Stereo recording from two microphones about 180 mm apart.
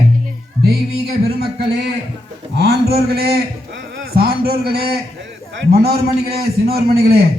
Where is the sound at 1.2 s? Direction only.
60° right (ahead or behind).